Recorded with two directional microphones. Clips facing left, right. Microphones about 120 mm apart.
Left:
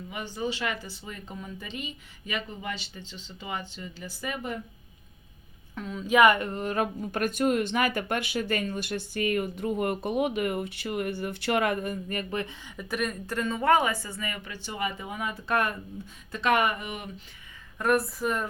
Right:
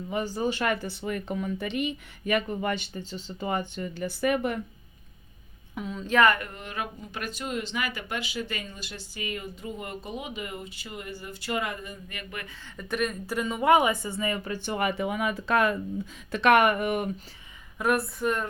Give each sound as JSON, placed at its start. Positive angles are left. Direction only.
{"t": 0.1, "sound": "speech", "side_deg": -40}
{"t": 5.7, "sound": "speech", "side_deg": 0}
{"t": 6.5, "sound": "speech", "side_deg": 40}
{"t": 12.6, "sound": "a woman's voice", "side_deg": 5}
{"t": 14.5, "sound": "speech", "side_deg": -55}
{"t": 16.3, "sound": "speech", "side_deg": -65}
{"t": 17.7, "sound": "speech", "side_deg": 0}